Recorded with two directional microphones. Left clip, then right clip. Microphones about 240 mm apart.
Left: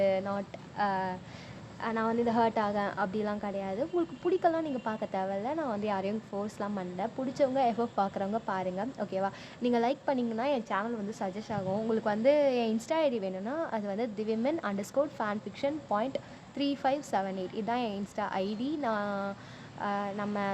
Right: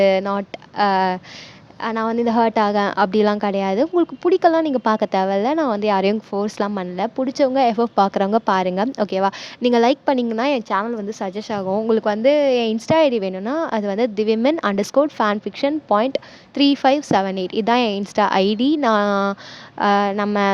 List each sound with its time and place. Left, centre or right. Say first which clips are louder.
0.0 s a woman's voice: right 12 dB; right